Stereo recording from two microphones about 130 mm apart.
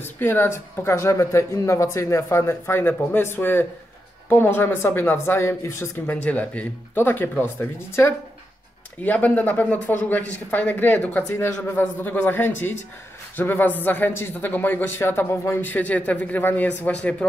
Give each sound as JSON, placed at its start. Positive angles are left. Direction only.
{"t": 0.0, "sound": "speech", "side_deg": 15}